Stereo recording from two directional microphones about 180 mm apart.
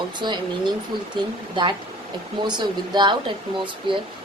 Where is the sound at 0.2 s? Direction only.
25° right (ahead or behind).